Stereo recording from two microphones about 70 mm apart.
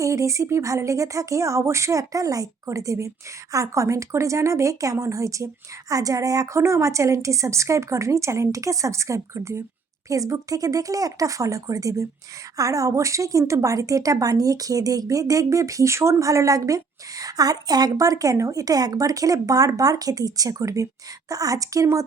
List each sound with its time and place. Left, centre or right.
0.0 s a woman's voice: right
6.6 s speech: right
10.1 s a woman's voice: right